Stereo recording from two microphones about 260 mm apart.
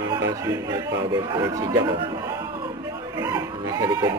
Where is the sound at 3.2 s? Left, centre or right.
Centre.